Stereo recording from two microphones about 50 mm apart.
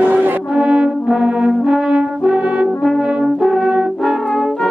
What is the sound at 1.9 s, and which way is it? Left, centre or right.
French horn, right.